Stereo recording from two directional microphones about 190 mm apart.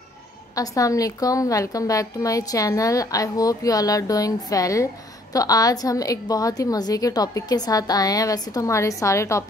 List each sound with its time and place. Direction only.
0.6 s a woman's voice: 20° left (ahead or behind)